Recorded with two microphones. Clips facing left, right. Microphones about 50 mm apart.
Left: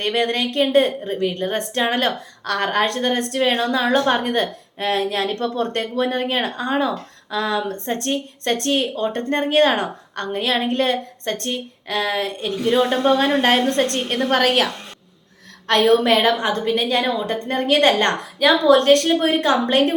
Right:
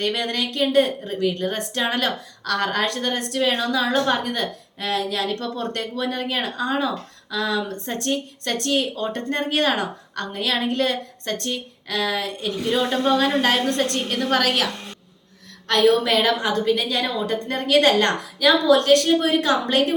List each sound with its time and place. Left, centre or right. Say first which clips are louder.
0.0 s a woman's voice: left 4 dB; left